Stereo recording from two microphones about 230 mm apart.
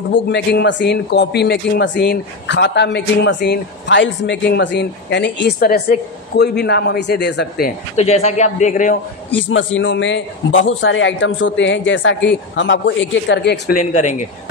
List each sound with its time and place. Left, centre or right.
0.1 s speech: left
9.3 s speech: left